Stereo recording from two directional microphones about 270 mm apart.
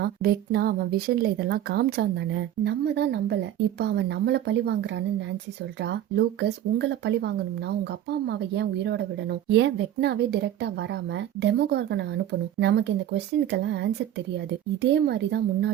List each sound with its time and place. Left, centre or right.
0.0 s a woman's voice: right